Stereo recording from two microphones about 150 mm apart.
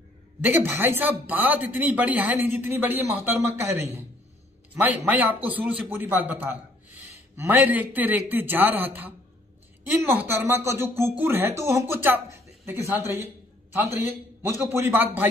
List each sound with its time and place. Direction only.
0.4 s a man's voice: 15° right (ahead or behind)
10.1 s a man's voice: 15° right (ahead or behind)